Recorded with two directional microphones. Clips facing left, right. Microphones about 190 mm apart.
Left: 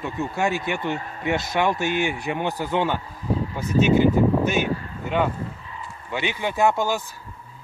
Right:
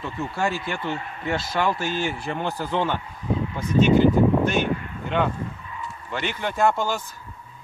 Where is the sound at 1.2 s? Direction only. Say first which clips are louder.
Left 2 dB; 15° left (ahead or behind).